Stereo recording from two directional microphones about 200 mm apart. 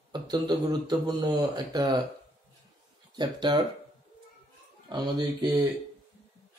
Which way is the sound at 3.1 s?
20° right (ahead or behind).